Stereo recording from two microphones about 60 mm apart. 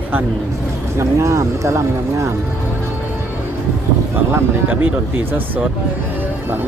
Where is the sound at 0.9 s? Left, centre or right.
Right.